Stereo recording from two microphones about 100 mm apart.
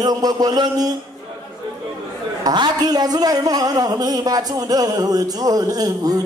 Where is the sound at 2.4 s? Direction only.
45° right (ahead or behind).